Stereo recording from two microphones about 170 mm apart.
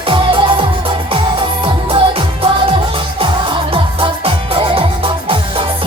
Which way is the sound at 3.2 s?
30° right (ahead or behind).